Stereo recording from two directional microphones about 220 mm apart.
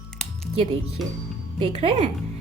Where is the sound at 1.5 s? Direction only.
25° right (ahead or behind).